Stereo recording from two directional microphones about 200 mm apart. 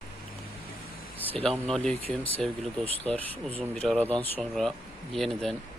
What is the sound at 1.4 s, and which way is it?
Speech, 5° left (ahead or behind).